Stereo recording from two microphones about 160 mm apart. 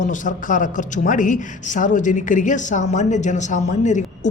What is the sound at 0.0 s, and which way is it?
A woman's voice, 55° left (ahead or behind).